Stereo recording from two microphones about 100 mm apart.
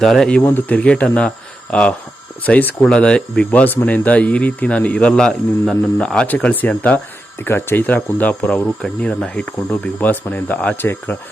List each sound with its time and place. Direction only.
0.0 s speech: centre (ahead or behind); by 11.2 s 20° left (ahead or behind)